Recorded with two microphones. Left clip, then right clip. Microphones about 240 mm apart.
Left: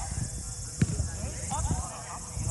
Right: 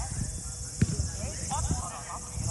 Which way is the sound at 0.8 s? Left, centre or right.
Centre.